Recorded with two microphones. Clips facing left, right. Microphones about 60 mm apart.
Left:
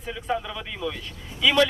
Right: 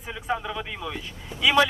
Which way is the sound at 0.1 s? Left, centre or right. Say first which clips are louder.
Even; centre.